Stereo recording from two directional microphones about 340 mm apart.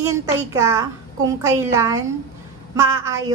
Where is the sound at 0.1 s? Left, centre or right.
Centre.